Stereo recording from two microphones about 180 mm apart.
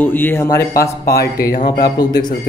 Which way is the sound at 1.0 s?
60° left (ahead or behind).